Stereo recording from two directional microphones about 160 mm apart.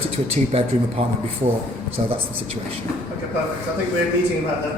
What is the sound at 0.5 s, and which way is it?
Speech, 40° right (ahead or behind).